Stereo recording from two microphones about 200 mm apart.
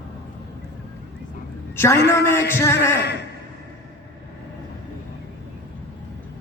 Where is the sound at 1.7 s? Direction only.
10° left (ahead or behind).